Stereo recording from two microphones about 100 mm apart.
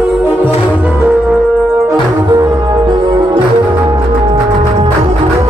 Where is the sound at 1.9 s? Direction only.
40° right (ahead or behind).